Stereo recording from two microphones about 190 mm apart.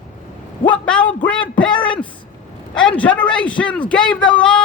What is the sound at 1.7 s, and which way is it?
Speech, 25° left (ahead or behind).